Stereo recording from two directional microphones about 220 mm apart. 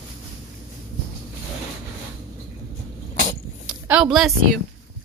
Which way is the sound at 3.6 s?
5° right (ahead or behind).